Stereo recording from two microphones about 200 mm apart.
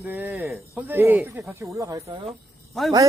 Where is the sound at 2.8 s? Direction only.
Centre (ahead or behind).